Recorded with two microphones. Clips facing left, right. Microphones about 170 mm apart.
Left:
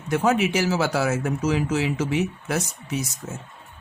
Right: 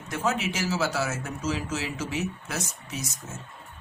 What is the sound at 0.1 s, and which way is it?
Speech, 60° left (ahead or behind).